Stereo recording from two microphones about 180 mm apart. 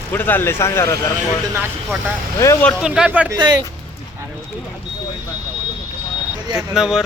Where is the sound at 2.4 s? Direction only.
15° left (ahead or behind).